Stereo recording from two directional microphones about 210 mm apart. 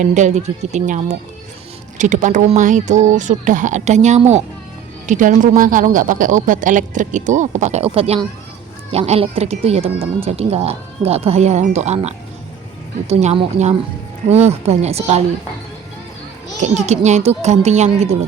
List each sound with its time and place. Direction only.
0.0 s speech: 35° right (ahead or behind)
16.6 s speech: 35° right (ahead or behind)